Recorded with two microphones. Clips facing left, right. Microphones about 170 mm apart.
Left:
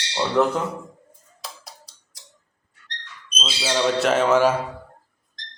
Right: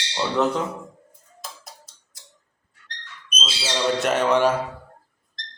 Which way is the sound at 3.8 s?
Centre (ahead or behind).